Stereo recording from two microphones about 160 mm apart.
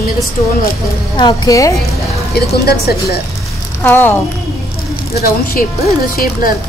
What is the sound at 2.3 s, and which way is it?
Speech, 80° left.